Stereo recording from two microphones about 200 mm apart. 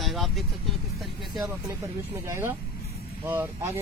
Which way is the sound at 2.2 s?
10° right (ahead or behind).